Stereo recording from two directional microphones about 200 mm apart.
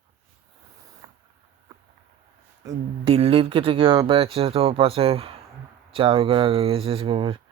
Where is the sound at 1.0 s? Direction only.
20° right (ahead or behind).